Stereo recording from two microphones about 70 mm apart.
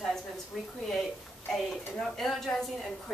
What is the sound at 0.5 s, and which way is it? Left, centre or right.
Speech, centre.